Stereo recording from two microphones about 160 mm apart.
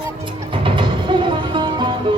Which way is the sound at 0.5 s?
30° right (ahead or behind).